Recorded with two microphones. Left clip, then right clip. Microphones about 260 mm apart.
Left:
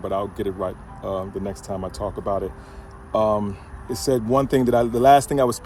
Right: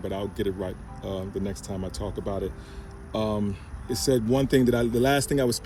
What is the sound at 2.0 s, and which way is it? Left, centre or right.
Speech, left.